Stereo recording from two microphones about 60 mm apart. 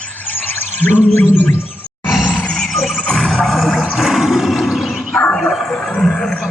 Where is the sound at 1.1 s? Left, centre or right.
Left.